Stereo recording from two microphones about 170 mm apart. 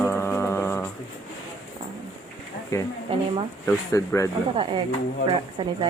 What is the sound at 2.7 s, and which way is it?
Speech, 20° left (ahead or behind).